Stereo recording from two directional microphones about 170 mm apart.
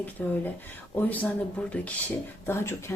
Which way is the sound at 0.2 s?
10° left (ahead or behind).